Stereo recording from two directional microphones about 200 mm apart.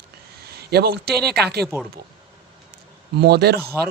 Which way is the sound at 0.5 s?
50° right (ahead or behind).